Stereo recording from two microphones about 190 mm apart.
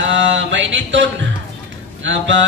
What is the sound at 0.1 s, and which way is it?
Mantra, 75° right (ahead or behind).